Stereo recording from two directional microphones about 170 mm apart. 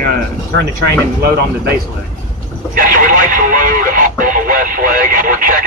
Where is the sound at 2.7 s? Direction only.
55° right (ahead or behind).